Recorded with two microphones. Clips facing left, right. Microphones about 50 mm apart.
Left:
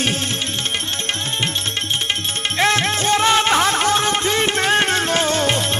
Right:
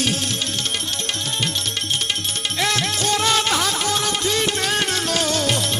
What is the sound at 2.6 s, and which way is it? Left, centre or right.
Music, left.